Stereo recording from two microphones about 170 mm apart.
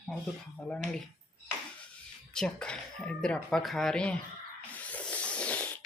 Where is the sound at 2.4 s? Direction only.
5° left (ahead or behind).